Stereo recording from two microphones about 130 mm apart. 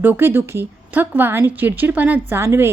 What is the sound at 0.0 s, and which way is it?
A woman's voice, 15° right (ahead or behind).